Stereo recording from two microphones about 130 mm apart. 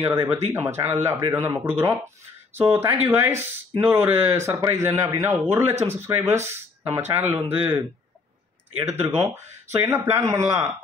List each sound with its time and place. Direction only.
0.0 s speech: 20° right (ahead or behind)
8.9 s speech: 20° right (ahead or behind)